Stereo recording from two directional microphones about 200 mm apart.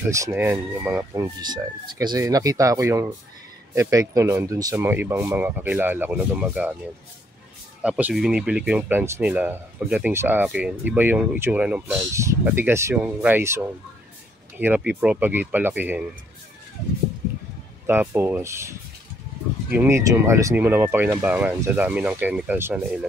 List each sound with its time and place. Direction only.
0.3 s speech: 10° right (ahead or behind)
7.8 s speech: 5° right (ahead or behind)
17.8 s speech: 10° right (ahead or behind)